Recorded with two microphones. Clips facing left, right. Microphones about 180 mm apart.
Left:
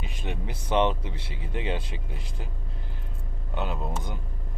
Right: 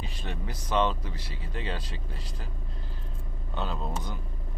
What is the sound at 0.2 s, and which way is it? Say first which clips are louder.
Speech: left 5 dB; 20° left (ahead or behind).